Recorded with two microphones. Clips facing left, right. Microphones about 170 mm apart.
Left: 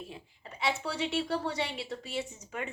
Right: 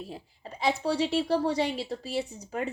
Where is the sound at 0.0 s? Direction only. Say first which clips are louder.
Right 4 dB; 35° right (ahead or behind).